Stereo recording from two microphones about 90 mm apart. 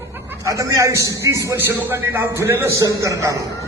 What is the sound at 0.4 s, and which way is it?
A man's voice, 40° right (ahead or behind).